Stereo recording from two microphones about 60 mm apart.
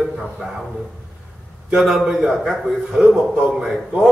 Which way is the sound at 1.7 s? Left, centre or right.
Centre.